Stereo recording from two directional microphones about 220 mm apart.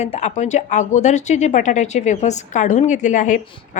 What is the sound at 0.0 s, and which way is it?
A woman's voice, 30° left (ahead or behind).